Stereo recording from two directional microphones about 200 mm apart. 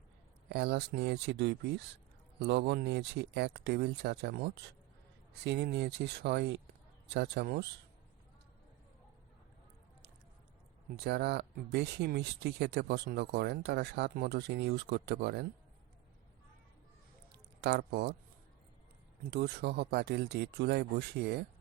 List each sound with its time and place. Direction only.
0.4 s speech: 55° right (ahead or behind)
10.9 s speech: 55° right (ahead or behind)
17.3 s a sound: 55° right (ahead or behind)
19.3 s speech: 55° right (ahead or behind)